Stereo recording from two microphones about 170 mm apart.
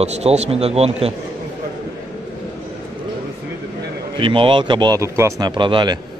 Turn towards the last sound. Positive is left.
turn(degrees=-30)  # may be behind; listen again after turning